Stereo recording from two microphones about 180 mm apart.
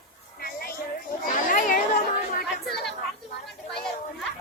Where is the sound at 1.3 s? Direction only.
45° left (ahead or behind).